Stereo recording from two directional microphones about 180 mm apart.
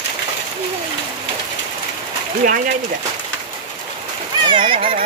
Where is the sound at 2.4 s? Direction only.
50° right (ahead or behind).